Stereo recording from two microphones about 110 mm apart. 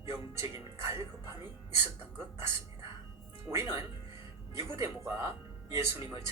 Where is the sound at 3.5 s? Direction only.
10° right (ahead or behind).